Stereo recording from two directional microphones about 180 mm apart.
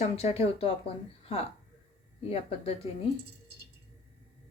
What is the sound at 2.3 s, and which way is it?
Speech, 35° left (ahead or behind).